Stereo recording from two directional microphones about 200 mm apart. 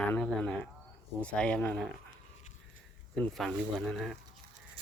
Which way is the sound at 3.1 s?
Centre (ahead or behind).